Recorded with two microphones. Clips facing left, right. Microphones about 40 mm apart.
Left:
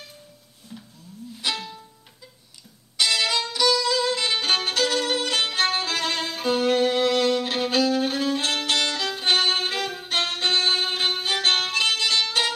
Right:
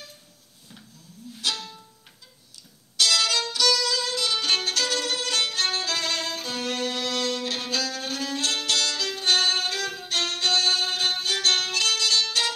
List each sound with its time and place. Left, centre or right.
1.4 s music: left
3.0 s music: left